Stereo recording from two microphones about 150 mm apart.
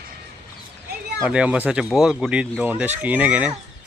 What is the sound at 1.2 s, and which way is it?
Speech, 10° right (ahead or behind).